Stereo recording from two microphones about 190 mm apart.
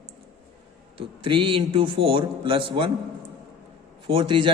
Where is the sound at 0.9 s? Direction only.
25° right (ahead or behind).